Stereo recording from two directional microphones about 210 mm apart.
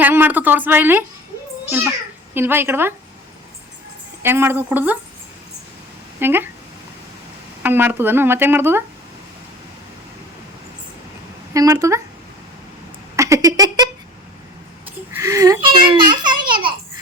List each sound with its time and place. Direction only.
0.0 s speech: 10° right (ahead or behind)
2.3 s speech: 10° right (ahead or behind)
4.2 s speech: 10° right (ahead or behind)
6.1 s speech: 10° right (ahead or behind)
7.6 s speech: 10° right (ahead or behind)
11.5 s speech: 15° right (ahead or behind)
13.1 s a sound: 15° right (ahead or behind)
15.1 s a child's voice: 15° right (ahead or behind)